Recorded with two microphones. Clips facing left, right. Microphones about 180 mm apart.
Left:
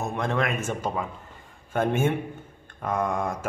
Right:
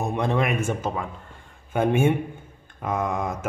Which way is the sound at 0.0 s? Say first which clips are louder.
Right 3 dB; 15° right (ahead or behind).